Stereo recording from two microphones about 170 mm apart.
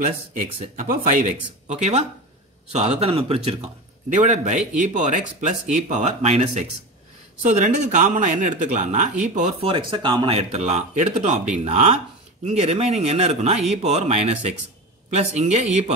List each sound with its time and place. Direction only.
0.7 s speech: 50° right (ahead or behind)
4.1 s speech: 45° right (ahead or behind)
9.7 s speech: 30° right (ahead or behind)
10.5 s speech: 40° right (ahead or behind)